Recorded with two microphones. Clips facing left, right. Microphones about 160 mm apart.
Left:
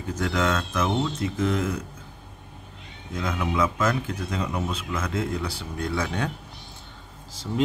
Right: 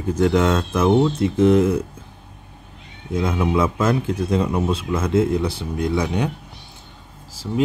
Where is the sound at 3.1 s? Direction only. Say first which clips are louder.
Right 6 dB; 30° right (ahead or behind).